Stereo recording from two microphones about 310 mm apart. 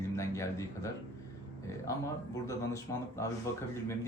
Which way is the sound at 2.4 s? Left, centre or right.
Centre.